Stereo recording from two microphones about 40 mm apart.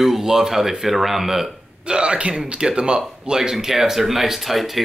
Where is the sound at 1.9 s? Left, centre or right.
Right.